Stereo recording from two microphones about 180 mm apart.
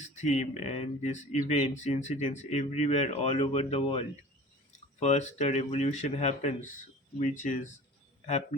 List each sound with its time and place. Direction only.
0.0 s speech: 40° left (ahead or behind)